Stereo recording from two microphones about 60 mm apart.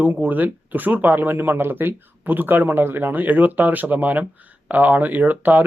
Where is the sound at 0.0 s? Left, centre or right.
Right.